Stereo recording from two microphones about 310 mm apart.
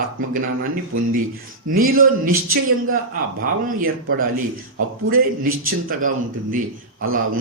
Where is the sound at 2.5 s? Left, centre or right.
Right.